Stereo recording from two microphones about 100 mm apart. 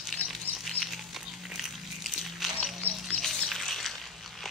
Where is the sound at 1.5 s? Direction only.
Centre (ahead or behind).